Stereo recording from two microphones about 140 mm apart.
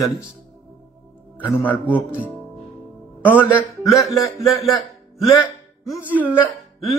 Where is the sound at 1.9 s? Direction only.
10° right (ahead or behind).